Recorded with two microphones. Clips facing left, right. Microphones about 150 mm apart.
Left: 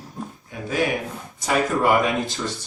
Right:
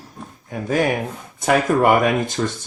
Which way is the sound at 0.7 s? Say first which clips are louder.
Right 4 dB; 45° right (ahead or behind).